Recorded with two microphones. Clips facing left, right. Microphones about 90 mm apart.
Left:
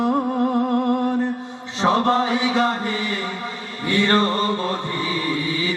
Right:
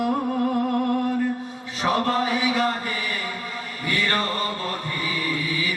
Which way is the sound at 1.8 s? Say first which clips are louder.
Left 4 dB; 25° left (ahead or behind).